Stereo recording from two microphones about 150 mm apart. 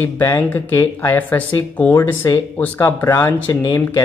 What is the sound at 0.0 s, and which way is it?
Speech, 15° left (ahead or behind).